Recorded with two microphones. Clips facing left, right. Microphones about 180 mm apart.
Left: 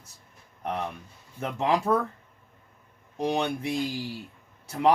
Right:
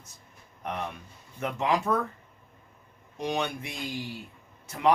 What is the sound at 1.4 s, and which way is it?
Speech, 35° left (ahead or behind).